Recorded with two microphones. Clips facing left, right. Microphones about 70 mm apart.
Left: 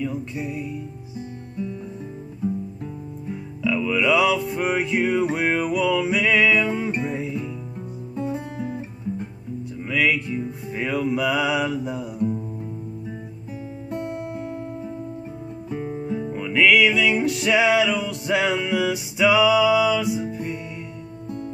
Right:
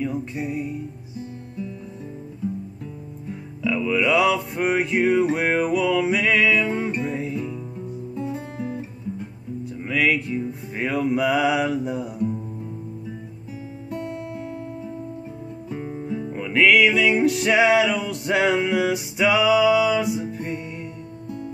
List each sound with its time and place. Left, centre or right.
0.0 s music: centre
3.6 s music: centre
6.6 s music: right
6.9 s music: centre
9.8 s music: centre
15.7 s guitar: centre
16.3 s music: centre
20.3 s music: right